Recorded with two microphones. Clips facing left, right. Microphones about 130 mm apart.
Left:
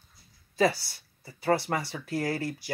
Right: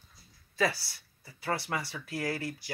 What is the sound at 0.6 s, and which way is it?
Speech, 25° left (ahead or behind).